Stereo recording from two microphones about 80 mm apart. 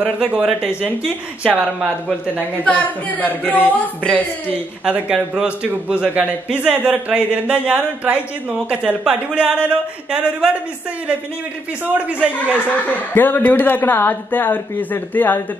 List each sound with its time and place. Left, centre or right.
0.0 s a man's voice: centre
2.6 s speech: centre
4.8 s a man's voice: centre
11.8 s a man's voice: centre
12.7 s speech: left